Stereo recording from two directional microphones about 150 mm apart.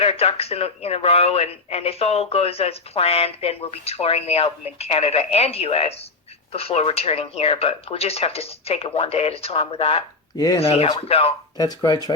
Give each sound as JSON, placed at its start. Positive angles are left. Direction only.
{"t": 0.0, "sound": "speech", "side_deg": 40}
{"t": 10.3, "sound": "speech", "side_deg": 25}
{"t": 10.6, "sound": "speech", "side_deg": 40}
{"t": 11.6, "sound": "speech", "side_deg": 25}